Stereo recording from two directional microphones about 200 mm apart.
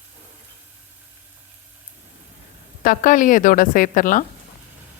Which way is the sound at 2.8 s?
40° left (ahead or behind).